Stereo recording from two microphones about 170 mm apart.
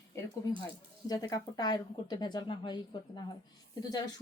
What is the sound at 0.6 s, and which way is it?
Speech, 20° left (ahead or behind).